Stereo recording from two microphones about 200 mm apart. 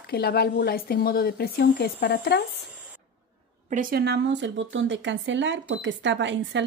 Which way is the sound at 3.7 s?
45° right (ahead or behind).